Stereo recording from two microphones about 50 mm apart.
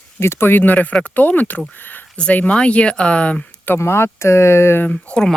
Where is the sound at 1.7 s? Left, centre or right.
Left.